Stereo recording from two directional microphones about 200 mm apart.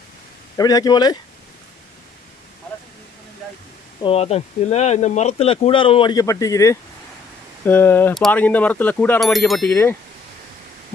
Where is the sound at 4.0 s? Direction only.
30° left (ahead or behind); by 9.9 s 10° left (ahead or behind).